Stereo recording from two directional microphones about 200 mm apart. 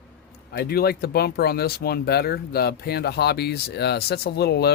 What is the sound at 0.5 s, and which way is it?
Speech, 50° left (ahead or behind).